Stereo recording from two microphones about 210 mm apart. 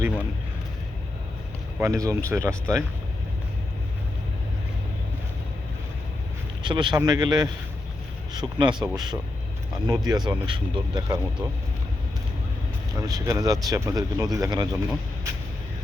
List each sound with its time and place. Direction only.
1.8 s speech: 15° right (ahead or behind)
6.6 s speech: 20° right (ahead or behind)
13.0 s speech: 15° right (ahead or behind)